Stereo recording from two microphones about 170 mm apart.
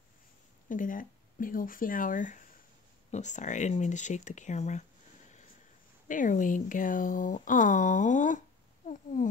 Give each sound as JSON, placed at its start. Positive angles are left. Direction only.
{"t": 0.7, "sound": "speech", "side_deg": 50}
{"t": 6.0, "sound": "speech", "side_deg": 50}